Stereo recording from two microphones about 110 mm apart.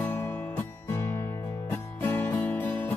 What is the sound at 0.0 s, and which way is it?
Music, 20° left (ahead or behind).